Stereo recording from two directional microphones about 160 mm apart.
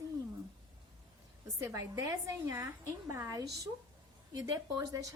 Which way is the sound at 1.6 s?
20° right (ahead or behind).